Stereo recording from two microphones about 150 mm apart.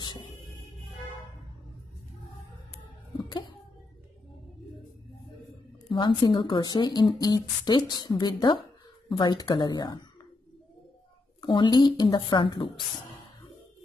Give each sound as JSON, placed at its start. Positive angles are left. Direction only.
{"t": 0.0, "sound": "music", "side_deg": 30}
{"t": 5.9, "sound": "speech", "side_deg": 35}
{"t": 11.4, "sound": "speech", "side_deg": 35}